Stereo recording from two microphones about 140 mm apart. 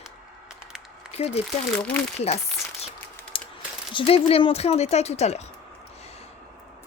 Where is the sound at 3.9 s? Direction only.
40° left (ahead or behind).